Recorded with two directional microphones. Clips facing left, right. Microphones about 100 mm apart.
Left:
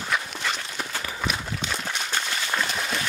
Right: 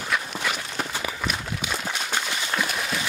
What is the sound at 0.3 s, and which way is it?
Clip-clop, 5° right (ahead or behind).